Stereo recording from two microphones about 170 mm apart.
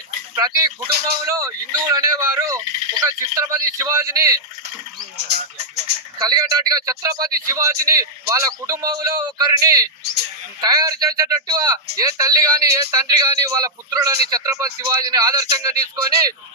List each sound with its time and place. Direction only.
0.3 s a man's voice: 20° right (ahead or behind)
6.1 s a man's voice: 20° right (ahead or behind)